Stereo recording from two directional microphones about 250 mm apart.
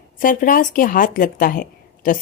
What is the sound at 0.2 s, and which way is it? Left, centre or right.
Speech, left.